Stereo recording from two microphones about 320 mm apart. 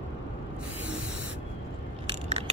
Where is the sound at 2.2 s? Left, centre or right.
Right.